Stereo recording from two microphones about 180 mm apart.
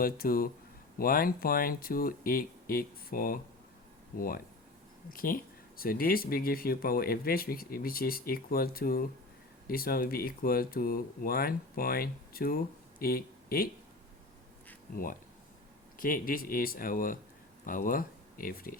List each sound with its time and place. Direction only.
0.0 s speech: 55° left (ahead or behind)
5.1 s speech: 50° left (ahead or behind)
16.0 s speech: 50° left (ahead or behind)